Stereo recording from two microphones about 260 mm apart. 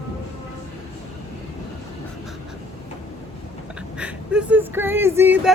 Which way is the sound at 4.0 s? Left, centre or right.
Centre.